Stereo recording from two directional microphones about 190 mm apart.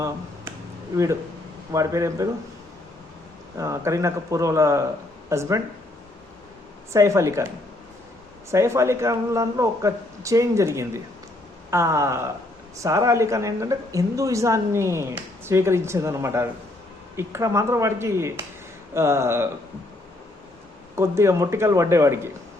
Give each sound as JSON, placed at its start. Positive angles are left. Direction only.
{"t": 1.7, "sound": "speech", "side_deg": -15}
{"t": 3.6, "sound": "speech", "side_deg": -15}
{"t": 6.9, "sound": "speech", "side_deg": -15}
{"t": 8.4, "sound": "speech", "side_deg": -15}
{"t": 20.9, "sound": "speech", "side_deg": -15}